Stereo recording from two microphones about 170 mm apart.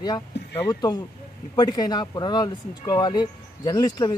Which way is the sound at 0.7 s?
25° left (ahead or behind).